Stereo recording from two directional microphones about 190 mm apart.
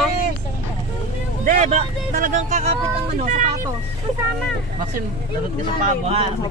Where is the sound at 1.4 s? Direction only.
35° right (ahead or behind).